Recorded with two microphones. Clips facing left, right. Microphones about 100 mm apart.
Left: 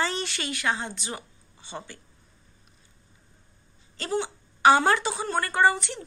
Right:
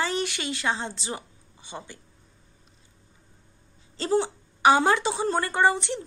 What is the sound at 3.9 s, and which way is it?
Speech, 30° right (ahead or behind).